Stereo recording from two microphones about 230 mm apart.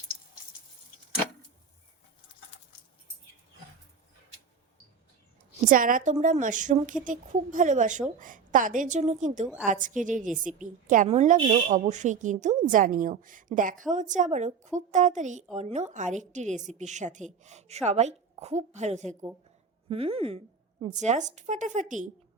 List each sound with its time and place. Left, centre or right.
5.6 s a woman's voice: right